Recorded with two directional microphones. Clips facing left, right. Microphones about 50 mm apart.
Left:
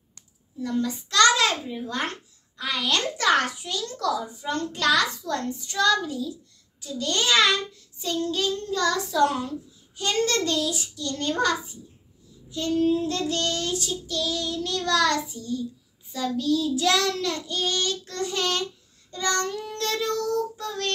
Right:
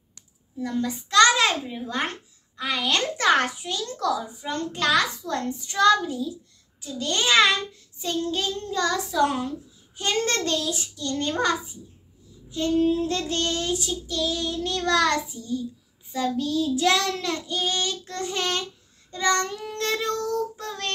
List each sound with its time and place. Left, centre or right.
0.6 s a child's voice: centre
9.9 s a child's voice: right
12.4 s child singing: right
13.1 s a child's voice: right